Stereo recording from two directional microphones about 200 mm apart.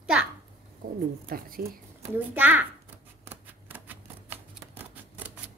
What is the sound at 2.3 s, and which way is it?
Speech, 10° right (ahead or behind).